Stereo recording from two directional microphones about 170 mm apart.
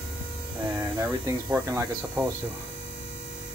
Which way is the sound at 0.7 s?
15° right (ahead or behind).